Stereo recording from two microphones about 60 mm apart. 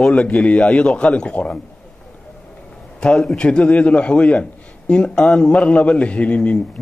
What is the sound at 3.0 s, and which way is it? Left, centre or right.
A man's voice, centre.